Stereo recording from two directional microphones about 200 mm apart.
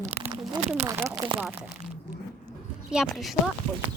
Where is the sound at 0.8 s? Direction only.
15° right (ahead or behind).